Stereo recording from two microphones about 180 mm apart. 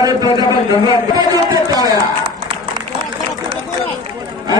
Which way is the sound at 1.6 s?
20° right (ahead or behind).